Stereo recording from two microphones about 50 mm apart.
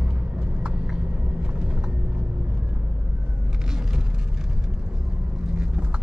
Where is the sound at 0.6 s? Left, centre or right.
Centre.